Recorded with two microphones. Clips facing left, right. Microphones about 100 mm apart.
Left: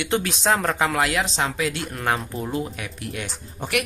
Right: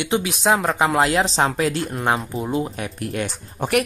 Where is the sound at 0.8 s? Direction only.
25° right (ahead or behind).